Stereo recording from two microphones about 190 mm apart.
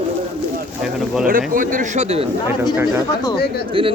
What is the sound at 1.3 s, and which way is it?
Speech, 45° right (ahead or behind).